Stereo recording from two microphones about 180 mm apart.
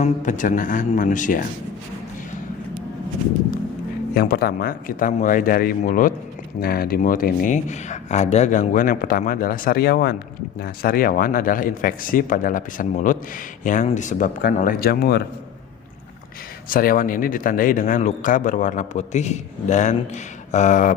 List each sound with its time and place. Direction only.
0.0 s speech: 45° left (ahead or behind)
4.1 s speech: 55° left (ahead or behind)
16.6 s speech: 50° left (ahead or behind)